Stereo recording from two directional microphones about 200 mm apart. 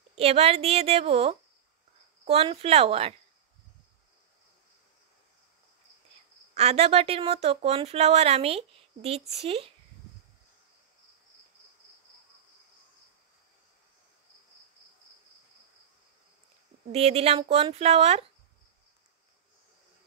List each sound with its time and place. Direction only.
0.1 s a woman's voice: 30° right (ahead or behind)
6.5 s a woman's voice: 30° right (ahead or behind)
16.9 s speech: 30° right (ahead or behind)